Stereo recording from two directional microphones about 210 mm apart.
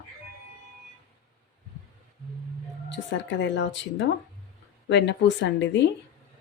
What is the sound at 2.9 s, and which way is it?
Speech, 60° left (ahead or behind).